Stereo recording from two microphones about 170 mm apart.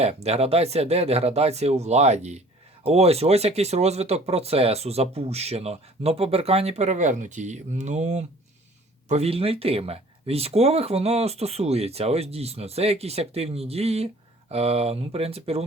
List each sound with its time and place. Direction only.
0.0 s speech: 35° right (ahead or behind)